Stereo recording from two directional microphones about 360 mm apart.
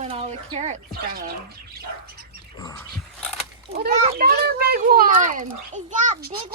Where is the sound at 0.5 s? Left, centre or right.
Right.